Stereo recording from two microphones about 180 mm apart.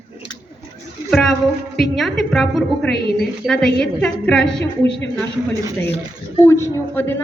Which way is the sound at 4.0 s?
5° left (ahead or behind).